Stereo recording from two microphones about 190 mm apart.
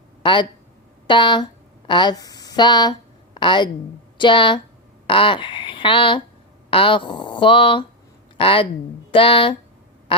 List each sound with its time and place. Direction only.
0.2 s speech: 25° left (ahead or behind)
10.1 s quack: 25° left (ahead or behind)